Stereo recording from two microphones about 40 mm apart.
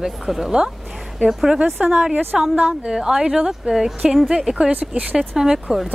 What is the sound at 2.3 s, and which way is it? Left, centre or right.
Speech, centre.